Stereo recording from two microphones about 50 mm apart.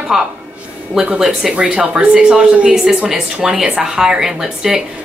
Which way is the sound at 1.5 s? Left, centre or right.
Centre.